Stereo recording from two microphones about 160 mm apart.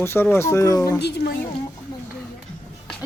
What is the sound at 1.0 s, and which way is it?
Speech, 90° left.